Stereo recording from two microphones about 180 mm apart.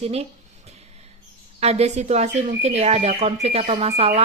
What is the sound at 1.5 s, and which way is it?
Speech, 35° right (ahead or behind).